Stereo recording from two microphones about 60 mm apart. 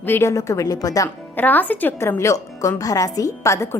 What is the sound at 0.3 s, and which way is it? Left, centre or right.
Speech, left.